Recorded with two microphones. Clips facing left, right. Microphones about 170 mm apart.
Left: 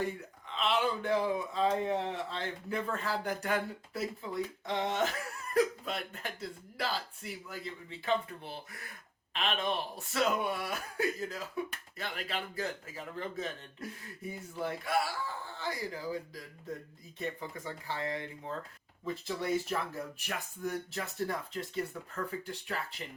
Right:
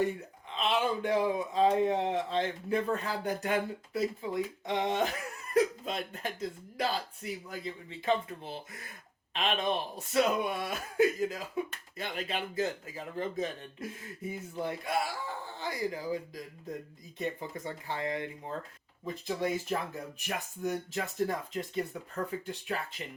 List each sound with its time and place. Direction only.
0.5 s speech: 20° right (ahead or behind)
9.3 s speech: 20° right (ahead or behind)
17.8 s speech: 20° right (ahead or behind)